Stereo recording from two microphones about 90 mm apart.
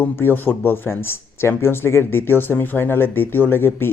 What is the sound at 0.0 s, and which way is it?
Speech, 20° left (ahead or behind).